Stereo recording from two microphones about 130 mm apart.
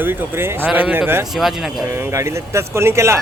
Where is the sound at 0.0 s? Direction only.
15° right (ahead or behind).